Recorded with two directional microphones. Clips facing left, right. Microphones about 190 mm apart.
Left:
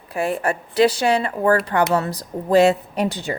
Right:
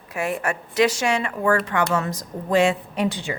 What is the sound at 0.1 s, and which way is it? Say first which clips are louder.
A woman's voice: left 3 dB; 35° left (ahead or behind).